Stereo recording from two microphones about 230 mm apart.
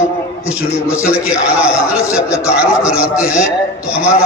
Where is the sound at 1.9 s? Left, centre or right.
Centre.